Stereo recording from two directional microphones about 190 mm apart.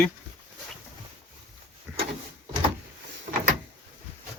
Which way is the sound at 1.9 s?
5° right (ahead or behind).